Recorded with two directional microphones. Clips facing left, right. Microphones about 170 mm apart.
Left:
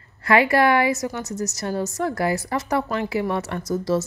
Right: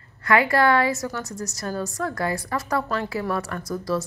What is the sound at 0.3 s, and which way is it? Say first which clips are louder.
Speech: left 2 dB; 25° left (ahead or behind).